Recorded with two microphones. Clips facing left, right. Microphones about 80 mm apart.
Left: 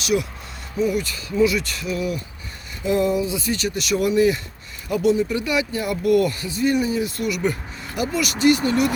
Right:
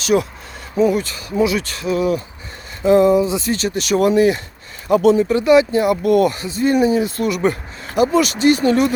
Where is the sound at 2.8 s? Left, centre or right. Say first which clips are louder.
Right 8 dB; right.